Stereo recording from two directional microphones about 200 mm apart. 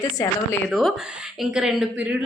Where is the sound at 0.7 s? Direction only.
Centre (ahead or behind).